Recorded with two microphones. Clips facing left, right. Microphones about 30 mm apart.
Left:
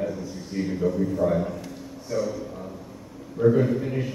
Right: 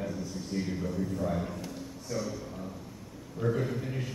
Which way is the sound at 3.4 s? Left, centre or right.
Centre.